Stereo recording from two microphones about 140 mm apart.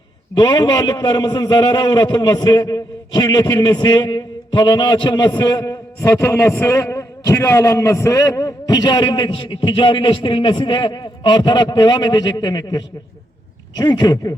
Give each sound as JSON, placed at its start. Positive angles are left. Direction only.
{"t": 0.3, "sound": "a man's voice", "side_deg": 30}